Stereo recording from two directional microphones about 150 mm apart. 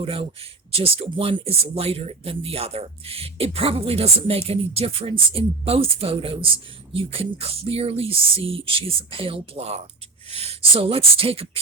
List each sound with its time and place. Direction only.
0.0 s speech: 40° right (ahead or behind)